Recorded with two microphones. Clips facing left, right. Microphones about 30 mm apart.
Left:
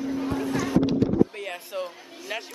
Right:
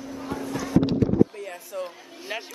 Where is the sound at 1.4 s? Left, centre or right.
Left.